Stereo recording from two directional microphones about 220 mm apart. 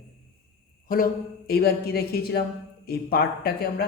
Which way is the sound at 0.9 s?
40° left (ahead or behind).